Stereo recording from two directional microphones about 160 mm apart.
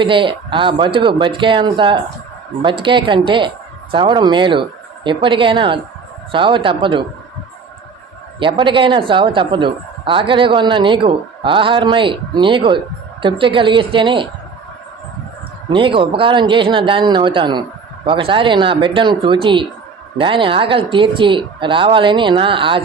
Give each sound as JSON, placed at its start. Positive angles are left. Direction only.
{"t": 0.0, "sound": "speech", "side_deg": -30}
{"t": 8.4, "sound": "speech", "side_deg": -30}
{"t": 15.7, "sound": "speech", "side_deg": -30}